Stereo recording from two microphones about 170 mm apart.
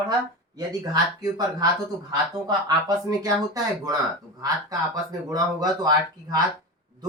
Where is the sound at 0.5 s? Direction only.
20° right (ahead or behind).